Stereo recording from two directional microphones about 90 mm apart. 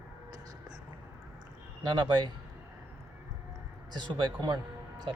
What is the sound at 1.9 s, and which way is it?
Speech, 55° right (ahead or behind).